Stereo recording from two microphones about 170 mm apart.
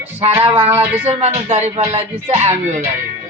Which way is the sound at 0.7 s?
10° right (ahead or behind).